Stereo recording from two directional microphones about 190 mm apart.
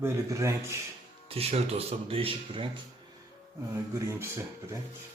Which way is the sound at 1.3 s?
30° right (ahead or behind).